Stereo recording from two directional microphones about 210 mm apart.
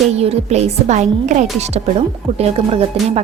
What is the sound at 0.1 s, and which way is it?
A woman's voice, 30° right (ahead or behind).